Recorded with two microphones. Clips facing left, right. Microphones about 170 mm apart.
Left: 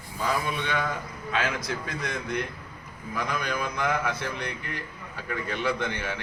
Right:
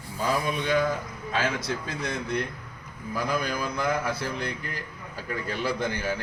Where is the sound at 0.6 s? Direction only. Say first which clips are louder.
Right 5 dB; 35° right (ahead or behind).